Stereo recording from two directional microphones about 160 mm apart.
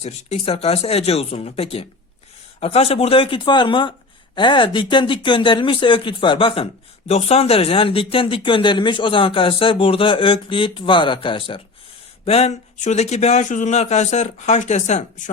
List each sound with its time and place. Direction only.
0.0 s speech: 45° left (ahead or behind)